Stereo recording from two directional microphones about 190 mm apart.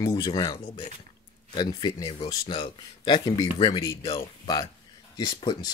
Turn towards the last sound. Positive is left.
turn(degrees=25)  # may be behind; listen again after turning